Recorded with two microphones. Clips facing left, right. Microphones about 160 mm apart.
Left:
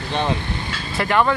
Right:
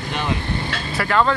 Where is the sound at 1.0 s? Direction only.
20° left (ahead or behind).